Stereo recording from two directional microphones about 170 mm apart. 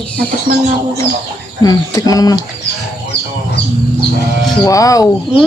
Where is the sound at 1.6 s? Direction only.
20° left (ahead or behind).